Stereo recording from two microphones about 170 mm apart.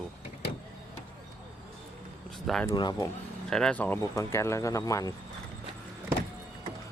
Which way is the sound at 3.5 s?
5° left (ahead or behind).